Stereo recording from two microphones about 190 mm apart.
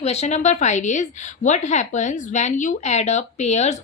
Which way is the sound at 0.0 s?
35° left (ahead or behind).